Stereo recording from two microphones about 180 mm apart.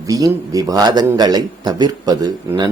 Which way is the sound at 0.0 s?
20° right (ahead or behind).